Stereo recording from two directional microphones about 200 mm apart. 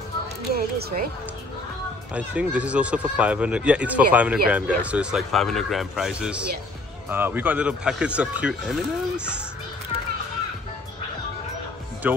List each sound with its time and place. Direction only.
0.5 s speech: 50° right (ahead or behind)
2.1 s speech: 5° right (ahead or behind)